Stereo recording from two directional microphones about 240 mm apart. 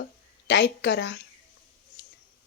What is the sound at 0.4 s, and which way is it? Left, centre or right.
Speech, left.